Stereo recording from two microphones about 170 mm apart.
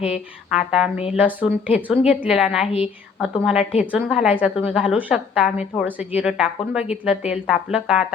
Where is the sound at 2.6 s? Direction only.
35° left (ahead or behind).